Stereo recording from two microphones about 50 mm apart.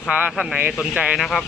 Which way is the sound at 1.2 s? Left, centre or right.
Centre.